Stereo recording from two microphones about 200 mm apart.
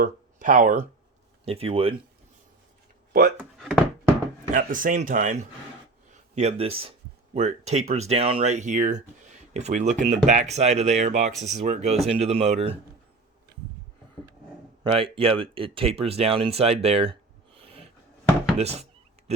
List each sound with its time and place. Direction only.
0.0 s speech: 40° right (ahead or behind)
1.5 s speech: 30° right (ahead or behind)
3.1 s speech: 50° right (ahead or behind)
3.3 s speech: centre (ahead or behind)
4.5 s speech: 40° right (ahead or behind)
14.8 s speech: 25° right (ahead or behind)
17.6 s a sound: 30° right (ahead or behind)
18.5 s speech: 30° right (ahead or behind)